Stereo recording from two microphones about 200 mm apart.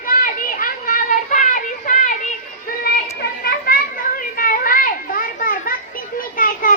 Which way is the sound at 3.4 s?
50° left (ahead or behind).